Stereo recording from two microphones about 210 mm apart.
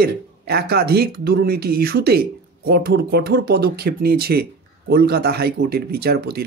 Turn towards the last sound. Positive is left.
turn(degrees=-50)  # may be behind; listen again after turning